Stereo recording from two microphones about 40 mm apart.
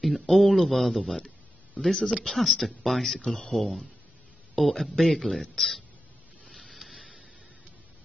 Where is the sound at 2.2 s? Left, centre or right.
Centre.